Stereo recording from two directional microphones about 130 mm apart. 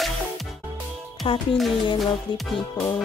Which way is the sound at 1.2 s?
40° left (ahead or behind).